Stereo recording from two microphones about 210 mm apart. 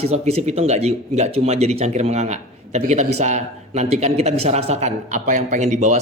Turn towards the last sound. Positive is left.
turn(degrees=-35)  # may be behind; listen again after turning